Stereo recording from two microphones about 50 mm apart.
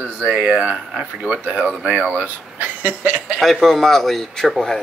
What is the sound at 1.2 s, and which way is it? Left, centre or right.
Speech, right.